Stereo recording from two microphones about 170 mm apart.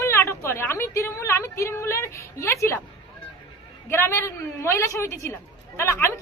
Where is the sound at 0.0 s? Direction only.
15° left (ahead or behind).